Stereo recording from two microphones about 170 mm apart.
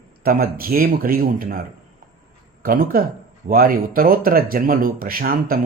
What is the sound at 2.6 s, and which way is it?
Speech, 55° right (ahead or behind).